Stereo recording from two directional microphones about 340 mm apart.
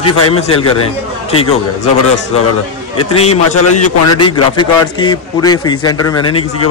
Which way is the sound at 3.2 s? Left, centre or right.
Left.